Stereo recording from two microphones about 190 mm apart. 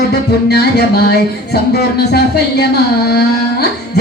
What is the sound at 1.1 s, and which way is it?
Speech, 60° left (ahead or behind).